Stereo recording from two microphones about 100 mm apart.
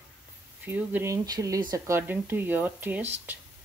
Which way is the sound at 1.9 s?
20° right (ahead or behind).